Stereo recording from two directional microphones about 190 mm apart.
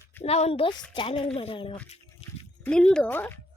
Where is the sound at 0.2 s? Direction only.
35° left (ahead or behind).